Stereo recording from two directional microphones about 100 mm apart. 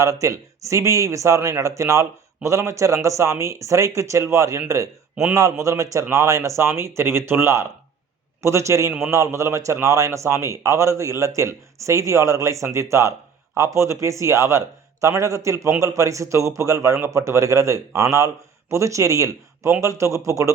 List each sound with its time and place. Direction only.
0.0 s speech: 30° right (ahead or behind)